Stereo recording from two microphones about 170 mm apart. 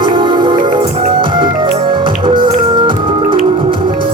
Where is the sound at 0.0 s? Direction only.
30° right (ahead or behind).